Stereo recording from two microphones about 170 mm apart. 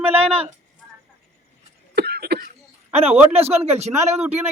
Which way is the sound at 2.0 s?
70° right (ahead or behind).